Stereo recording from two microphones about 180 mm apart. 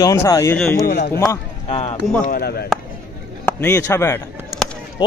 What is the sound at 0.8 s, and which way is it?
Speech, 60° left (ahead or behind).